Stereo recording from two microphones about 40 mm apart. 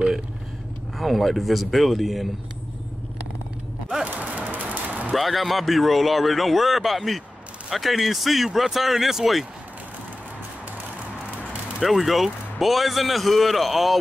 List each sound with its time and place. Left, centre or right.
0.9 s a man's voice: centre
4.1 s a sound: right
5.1 s a man's voice: centre
11.8 s a man's voice: centre